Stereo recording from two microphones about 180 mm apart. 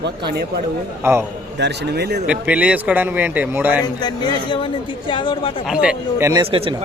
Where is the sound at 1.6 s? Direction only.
70° right (ahead or behind).